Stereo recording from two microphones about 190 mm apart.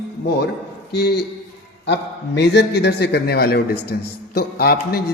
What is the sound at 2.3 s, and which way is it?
A man's voice, 60° left (ahead or behind).